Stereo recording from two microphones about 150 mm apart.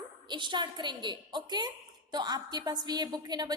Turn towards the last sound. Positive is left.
turn(degrees=-25)  # may be behind; listen again after turning